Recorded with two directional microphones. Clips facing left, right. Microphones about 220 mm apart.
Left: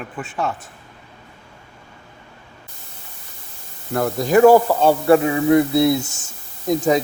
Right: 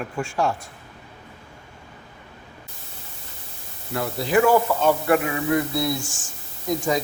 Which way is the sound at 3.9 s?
50° left (ahead or behind).